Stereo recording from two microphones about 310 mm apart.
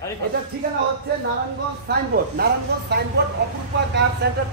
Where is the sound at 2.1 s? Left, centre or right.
Right.